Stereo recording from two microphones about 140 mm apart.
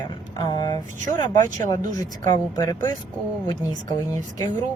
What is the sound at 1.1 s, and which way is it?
Speech, 65° right (ahead or behind).